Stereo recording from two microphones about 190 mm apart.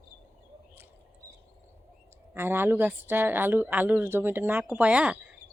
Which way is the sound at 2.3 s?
10° right (ahead or behind).